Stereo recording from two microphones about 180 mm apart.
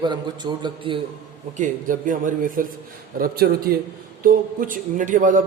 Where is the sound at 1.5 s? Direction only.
45° right (ahead or behind).